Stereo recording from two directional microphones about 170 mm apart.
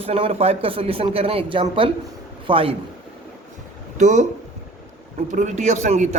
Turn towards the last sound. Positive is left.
turn(degrees=-45)  # may be behind; listen again after turning